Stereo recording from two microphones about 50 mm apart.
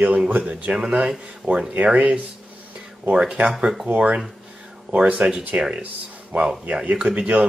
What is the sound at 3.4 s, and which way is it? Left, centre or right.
Speech, right.